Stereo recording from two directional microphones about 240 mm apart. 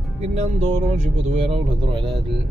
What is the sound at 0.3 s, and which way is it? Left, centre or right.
Speech, right.